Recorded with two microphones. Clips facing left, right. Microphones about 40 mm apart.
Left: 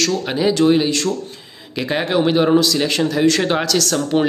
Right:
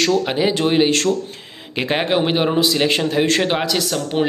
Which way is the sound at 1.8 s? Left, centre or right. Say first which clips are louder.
Even; right.